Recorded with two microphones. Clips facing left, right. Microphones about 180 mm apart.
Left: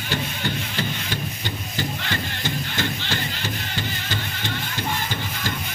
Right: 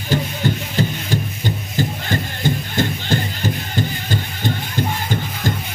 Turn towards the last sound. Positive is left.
turn(degrees=-45)  # may be behind; listen again after turning